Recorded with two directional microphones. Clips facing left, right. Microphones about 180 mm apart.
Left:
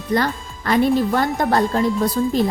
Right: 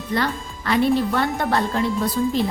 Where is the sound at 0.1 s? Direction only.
40° left (ahead or behind).